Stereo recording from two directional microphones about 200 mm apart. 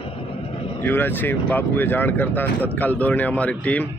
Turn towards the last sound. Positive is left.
turn(degrees=5)  # may be behind; listen again after turning